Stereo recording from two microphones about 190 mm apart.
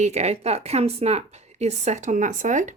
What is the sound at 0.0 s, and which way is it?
A woman's voice, 35° right (ahead or behind).